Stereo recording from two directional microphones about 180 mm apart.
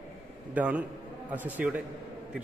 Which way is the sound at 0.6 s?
10° right (ahead or behind).